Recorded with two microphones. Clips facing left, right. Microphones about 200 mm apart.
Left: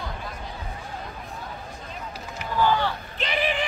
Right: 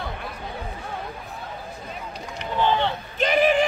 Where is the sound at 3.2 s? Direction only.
45° right (ahead or behind).